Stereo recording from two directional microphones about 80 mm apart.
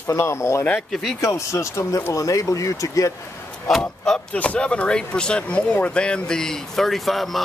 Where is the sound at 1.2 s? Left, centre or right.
Left.